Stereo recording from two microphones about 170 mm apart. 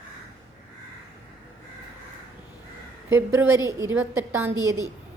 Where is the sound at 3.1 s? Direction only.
15° right (ahead or behind).